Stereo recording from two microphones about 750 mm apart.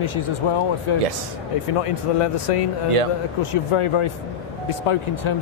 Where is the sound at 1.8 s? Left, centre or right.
Left.